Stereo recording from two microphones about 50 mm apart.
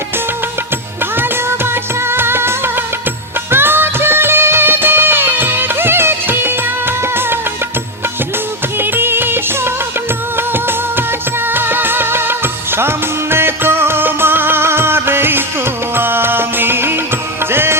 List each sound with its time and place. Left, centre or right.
1.1 s music: right
8.8 s music: right
10.3 s music of bollywood: right
11.4 s music: right